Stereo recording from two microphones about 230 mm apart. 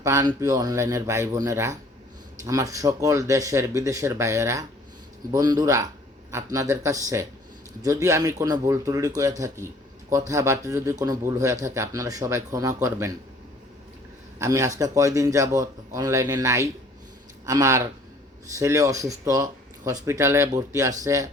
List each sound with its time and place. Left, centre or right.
0.0 s speech: centre
14.3 s speech: centre